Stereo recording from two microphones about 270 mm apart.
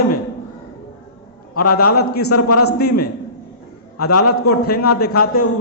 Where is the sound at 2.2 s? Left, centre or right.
Left.